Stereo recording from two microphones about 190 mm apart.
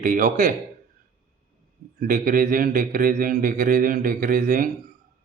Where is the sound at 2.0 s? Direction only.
45° right (ahead or behind).